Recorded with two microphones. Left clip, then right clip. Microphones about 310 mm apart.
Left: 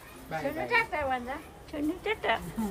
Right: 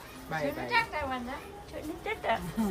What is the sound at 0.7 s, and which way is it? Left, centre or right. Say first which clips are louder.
Speech: left 3 dB; left.